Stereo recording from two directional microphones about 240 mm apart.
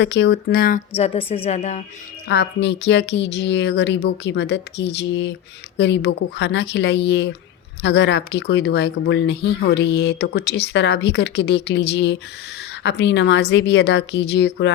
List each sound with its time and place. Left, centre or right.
0.0 s speech: left
0.9 s a woman's voice: left
2.2 s speech: left